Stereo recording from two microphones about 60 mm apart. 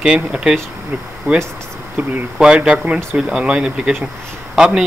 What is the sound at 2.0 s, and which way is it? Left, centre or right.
Speech, right.